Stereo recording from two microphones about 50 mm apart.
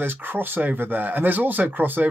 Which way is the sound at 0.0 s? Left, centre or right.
Right.